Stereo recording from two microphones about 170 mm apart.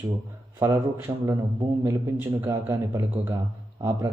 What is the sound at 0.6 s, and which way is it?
A man's voice, 15° right (ahead or behind).